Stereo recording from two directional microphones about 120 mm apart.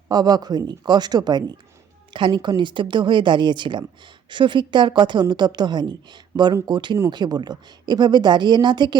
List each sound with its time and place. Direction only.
0.1 s a woman's voice: 35° right (ahead or behind)